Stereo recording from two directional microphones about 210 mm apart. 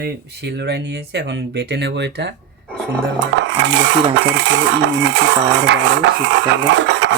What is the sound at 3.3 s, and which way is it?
Dishes, 60° right (ahead or behind).